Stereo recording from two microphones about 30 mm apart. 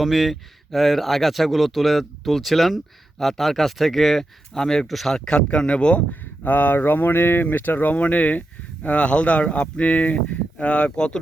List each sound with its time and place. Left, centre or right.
0.0 s speech: centre
4.2 s speech: centre
4.9 s speech: centre
5.5 s speech: left
6.4 s speech: left
8.0 s speech: left
9.0 s speech: left
10.9 s speech: left